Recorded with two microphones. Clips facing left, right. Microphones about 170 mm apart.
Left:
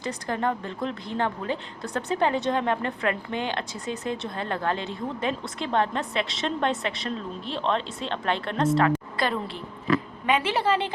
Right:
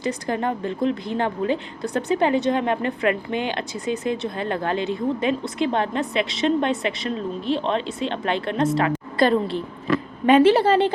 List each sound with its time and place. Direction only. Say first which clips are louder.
0.0 s speech: right 3 dB; 15° right (ahead or behind)
9.1 s a woman's voice: right 9 dB; 30° right (ahead or behind)